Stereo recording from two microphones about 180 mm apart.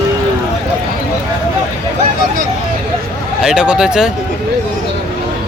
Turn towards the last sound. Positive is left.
turn(degrees=-5)  # may be behind; listen again after turning